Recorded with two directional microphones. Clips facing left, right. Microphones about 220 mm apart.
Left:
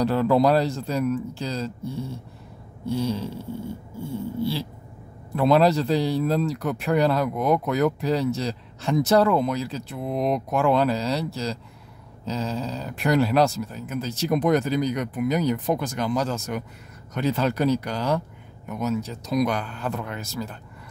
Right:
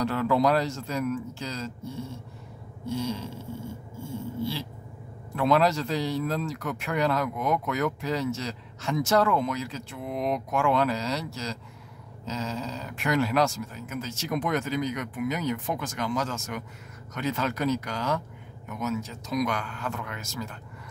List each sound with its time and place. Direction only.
0.0 s a man's voice: 35° left (ahead or behind)
4.0 s a sound: 35° left (ahead or behind)
5.3 s a man's voice: 35° left (ahead or behind)